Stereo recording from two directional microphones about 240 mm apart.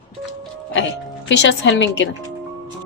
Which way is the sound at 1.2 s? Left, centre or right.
Left.